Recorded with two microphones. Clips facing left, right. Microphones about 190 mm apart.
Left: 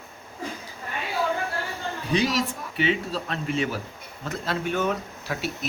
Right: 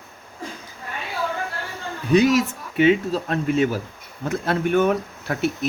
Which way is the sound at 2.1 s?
50° right (ahead or behind).